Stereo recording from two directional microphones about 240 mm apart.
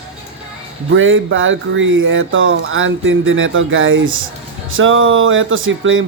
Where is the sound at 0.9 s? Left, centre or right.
Right.